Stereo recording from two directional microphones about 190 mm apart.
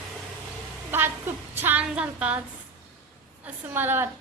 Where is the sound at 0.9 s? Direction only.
10° right (ahead or behind).